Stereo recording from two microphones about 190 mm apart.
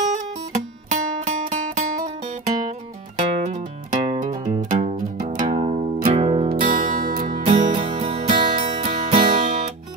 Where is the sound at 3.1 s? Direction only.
40° right (ahead or behind).